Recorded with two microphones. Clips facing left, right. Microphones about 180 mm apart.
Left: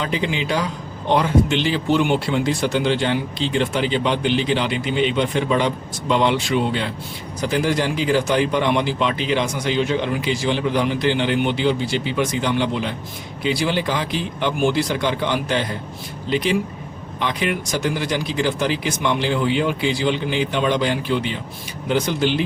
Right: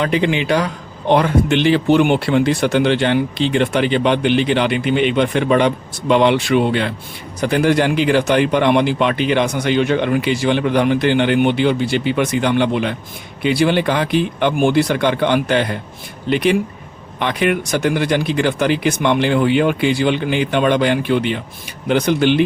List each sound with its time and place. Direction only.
0.0 s a man's voice: 65° right (ahead or behind)